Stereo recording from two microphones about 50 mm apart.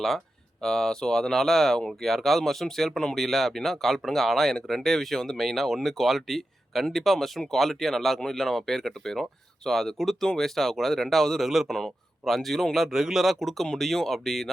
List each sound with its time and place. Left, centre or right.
0.6 s speech: centre